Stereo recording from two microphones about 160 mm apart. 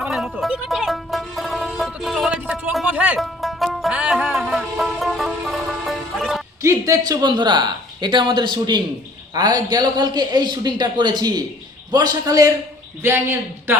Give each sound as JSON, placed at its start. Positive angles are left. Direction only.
{"t": 0.0, "sound": "music", "side_deg": 0}
{"t": 6.6, "sound": "a man's voice", "side_deg": -20}